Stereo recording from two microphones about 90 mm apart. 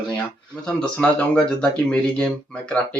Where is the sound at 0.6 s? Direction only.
10° left (ahead or behind).